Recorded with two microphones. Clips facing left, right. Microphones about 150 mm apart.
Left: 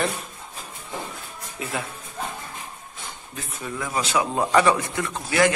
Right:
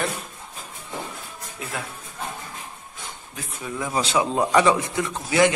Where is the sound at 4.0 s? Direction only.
25° right (ahead or behind).